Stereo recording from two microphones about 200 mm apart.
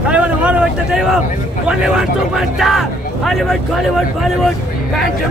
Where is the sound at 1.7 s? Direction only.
5° right (ahead or behind).